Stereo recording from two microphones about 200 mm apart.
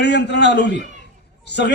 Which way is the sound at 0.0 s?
60° left (ahead or behind).